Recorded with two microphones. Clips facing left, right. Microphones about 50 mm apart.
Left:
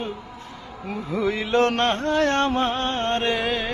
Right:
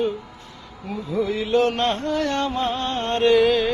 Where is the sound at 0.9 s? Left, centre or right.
Left.